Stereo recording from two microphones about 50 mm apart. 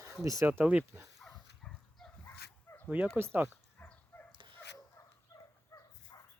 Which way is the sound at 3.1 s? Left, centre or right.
Right.